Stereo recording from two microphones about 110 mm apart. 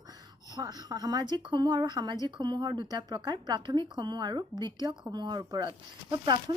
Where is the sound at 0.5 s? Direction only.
35° right (ahead or behind).